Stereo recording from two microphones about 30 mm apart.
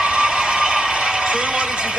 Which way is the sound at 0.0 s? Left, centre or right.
Right.